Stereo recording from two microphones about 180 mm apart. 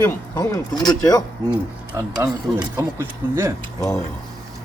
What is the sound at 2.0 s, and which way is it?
Speech, 20° right (ahead or behind).